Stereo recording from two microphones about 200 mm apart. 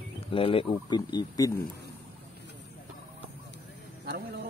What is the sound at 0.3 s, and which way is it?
Speech, 25° left (ahead or behind).